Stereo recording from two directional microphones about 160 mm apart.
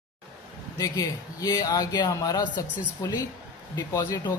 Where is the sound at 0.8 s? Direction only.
25° left (ahead or behind).